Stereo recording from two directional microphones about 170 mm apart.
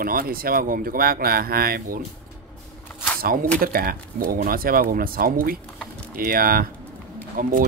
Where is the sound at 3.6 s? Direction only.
60° right (ahead or behind).